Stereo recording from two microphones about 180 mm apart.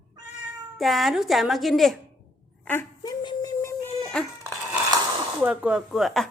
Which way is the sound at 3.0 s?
25° left (ahead or behind).